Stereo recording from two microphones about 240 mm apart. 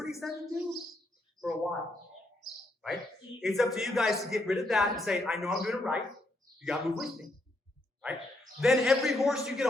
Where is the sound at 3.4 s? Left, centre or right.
Centre.